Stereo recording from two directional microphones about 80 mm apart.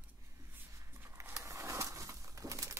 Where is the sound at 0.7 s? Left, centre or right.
Right.